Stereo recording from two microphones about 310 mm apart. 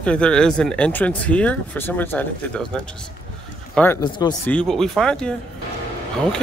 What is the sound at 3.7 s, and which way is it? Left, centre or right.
Speech, centre.